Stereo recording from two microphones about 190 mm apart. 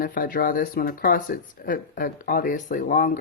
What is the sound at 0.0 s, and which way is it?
Speech, 50° left (ahead or behind).